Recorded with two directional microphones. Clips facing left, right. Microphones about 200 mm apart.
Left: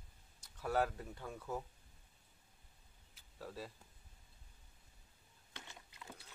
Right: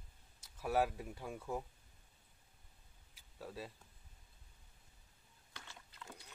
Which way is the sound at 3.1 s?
Centre (ahead or behind).